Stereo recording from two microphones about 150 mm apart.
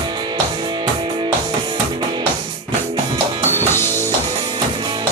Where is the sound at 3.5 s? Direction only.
15° left (ahead or behind).